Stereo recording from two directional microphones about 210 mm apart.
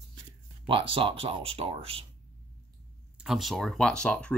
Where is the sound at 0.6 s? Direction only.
25° right (ahead or behind).